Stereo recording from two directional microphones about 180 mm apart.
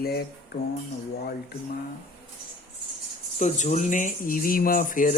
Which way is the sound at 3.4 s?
40° left (ahead or behind).